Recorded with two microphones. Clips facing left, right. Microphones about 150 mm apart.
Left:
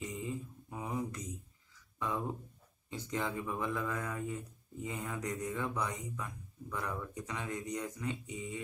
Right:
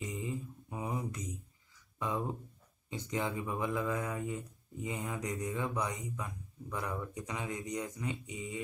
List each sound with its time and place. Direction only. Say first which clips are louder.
0.1 s mantra: right 1 dB; 20° right (ahead or behind)
2.0 s speech: right 1 dB; 15° right (ahead or behind)